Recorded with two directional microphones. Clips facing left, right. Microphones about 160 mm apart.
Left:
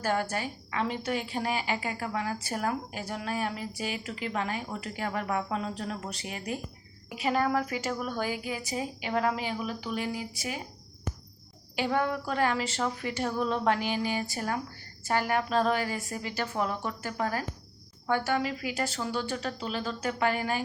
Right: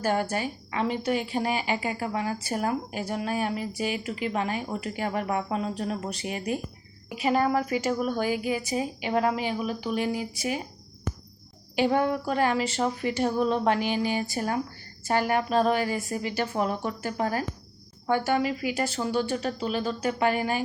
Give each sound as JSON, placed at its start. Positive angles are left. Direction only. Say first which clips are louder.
{"t": 0.0, "sound": "a woman's voice", "louder": "right 3 dB", "side_deg": -15}
{"t": 11.8, "sound": "a woman's voice", "louder": "right 5 dB", "side_deg": -25}